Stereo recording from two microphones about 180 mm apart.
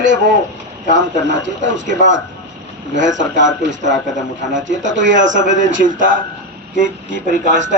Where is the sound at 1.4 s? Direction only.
85° right.